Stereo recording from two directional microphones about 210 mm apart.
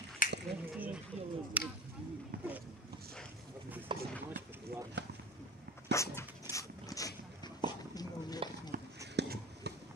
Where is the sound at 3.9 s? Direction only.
25° right (ahead or behind).